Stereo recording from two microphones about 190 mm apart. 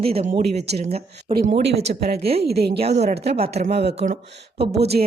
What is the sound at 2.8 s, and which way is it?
Speech, 35° right (ahead or behind).